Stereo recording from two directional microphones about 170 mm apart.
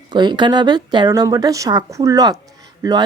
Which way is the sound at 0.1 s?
25° right (ahead or behind).